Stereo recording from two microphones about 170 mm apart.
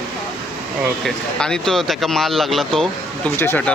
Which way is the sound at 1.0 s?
5° left (ahead or behind).